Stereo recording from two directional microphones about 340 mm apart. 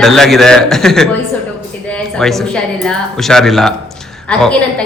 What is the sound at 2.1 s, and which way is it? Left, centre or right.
A man's voice, centre.